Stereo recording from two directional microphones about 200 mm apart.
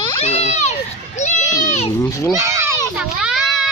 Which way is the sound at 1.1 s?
35° left (ahead or behind).